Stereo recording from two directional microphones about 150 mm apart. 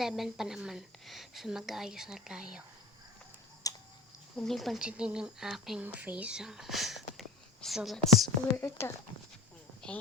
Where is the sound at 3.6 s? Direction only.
25° left (ahead or behind).